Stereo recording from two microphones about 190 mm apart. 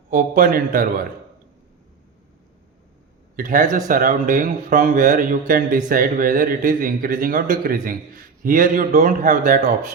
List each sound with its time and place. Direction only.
0.1 s a man's voice: 45° right (ahead or behind)
3.3 s a man's voice: 45° right (ahead or behind)